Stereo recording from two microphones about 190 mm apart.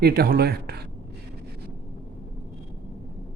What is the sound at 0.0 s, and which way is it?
Speech, 55° right (ahead or behind).